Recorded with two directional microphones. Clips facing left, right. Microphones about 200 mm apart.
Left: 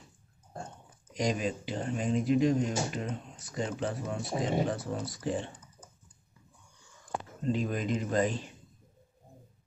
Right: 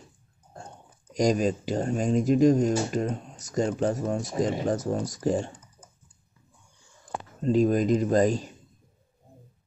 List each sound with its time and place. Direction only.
1.1 s speech: 40° right (ahead or behind)
7.4 s speech: 40° right (ahead or behind)